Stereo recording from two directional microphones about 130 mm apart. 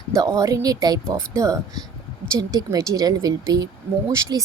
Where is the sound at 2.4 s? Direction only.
30° right (ahead or behind).